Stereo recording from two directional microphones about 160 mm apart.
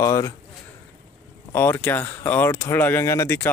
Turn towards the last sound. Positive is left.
turn(degrees=15)  # may be behind; listen again after turning